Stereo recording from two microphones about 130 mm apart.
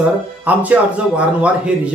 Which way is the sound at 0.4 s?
10° right (ahead or behind).